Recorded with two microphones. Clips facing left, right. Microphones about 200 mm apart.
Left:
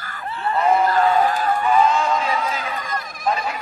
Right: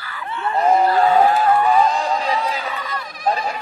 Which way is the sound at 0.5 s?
35° right (ahead or behind).